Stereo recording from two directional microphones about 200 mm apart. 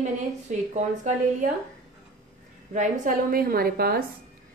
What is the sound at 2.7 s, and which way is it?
A woman's voice, 45° right (ahead or behind).